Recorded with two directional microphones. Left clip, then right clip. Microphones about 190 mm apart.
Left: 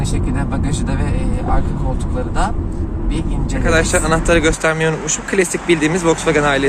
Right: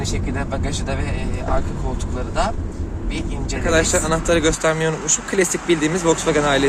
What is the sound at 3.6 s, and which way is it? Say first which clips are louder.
Speech: left 3 dB; 10° right (ahead or behind).